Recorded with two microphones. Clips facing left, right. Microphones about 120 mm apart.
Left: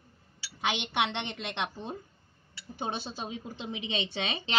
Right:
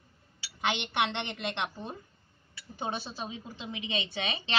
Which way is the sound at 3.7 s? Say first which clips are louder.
Even; 25° left (ahead or behind).